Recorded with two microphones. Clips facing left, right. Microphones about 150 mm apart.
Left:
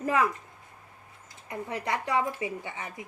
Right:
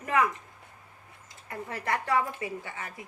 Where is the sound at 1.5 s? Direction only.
20° left (ahead or behind).